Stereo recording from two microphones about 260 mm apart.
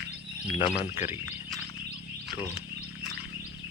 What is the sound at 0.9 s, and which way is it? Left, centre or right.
Speech, centre.